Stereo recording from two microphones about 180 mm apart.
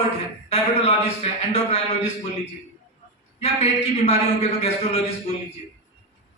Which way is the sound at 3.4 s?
35° left (ahead or behind).